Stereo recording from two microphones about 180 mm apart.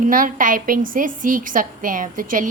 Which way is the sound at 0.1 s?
50° right (ahead or behind).